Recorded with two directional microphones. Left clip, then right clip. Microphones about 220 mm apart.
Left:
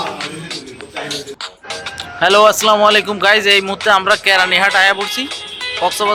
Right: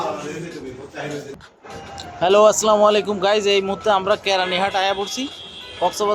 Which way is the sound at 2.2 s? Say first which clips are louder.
Left 4 dB; centre (ahead or behind).